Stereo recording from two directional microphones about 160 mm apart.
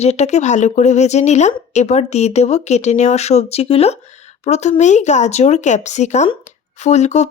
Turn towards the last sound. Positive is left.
turn(degrees=45)  # may be behind; listen again after turning